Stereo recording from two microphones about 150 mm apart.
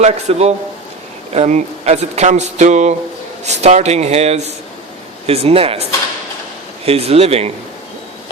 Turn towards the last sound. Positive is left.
turn(degrees=-45)  # may be behind; listen again after turning